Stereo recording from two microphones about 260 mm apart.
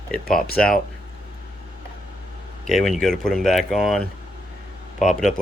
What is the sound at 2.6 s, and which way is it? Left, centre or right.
Speech, centre.